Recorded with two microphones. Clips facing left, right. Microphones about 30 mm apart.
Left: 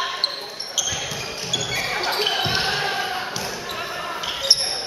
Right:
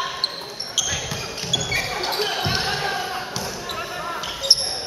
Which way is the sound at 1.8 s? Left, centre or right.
Left.